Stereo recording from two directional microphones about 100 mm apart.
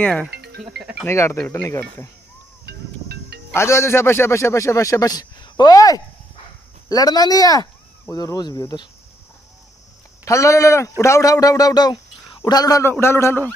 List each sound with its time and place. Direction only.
0.0 s speech: 15° left (ahead or behind)
1.0 s a man's voice: 25° left (ahead or behind)
3.5 s a man's voice: 30° left (ahead or behind); by 8.8 s 45° left (ahead or behind)
10.2 s a man's voice: 30° left (ahead or behind)
13.0 s a man's voice: 25° left (ahead or behind)